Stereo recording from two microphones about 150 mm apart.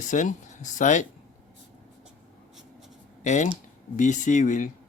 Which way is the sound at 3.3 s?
55° left (ahead or behind).